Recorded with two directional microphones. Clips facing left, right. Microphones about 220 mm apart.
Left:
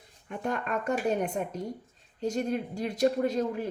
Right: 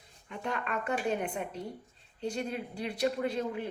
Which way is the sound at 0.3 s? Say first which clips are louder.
Left 4 dB; 45° left (ahead or behind).